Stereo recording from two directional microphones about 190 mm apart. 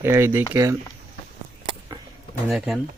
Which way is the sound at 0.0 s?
15° right (ahead or behind).